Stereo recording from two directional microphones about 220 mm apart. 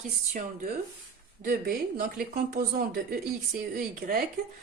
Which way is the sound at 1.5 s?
40° right (ahead or behind).